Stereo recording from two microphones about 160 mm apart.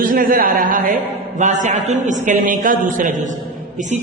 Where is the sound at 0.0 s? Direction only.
60° right (ahead or behind).